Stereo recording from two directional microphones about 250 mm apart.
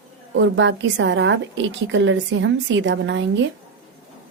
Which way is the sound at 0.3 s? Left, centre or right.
Right.